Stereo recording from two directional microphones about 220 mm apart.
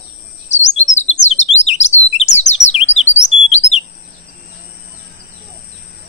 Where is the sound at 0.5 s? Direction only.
30° left (ahead or behind).